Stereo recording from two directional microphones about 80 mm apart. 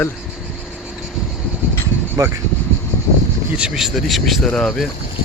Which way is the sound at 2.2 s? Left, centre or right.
Right.